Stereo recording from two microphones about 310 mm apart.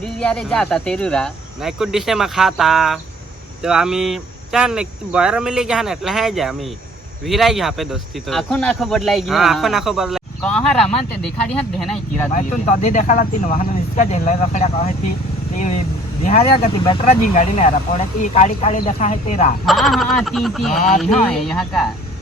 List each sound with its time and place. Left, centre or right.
0.0 s speech: centre
12.3 s speech: left
19.6 s speech: centre